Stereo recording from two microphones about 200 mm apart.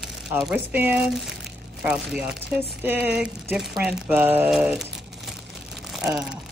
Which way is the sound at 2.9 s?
10° right (ahead or behind).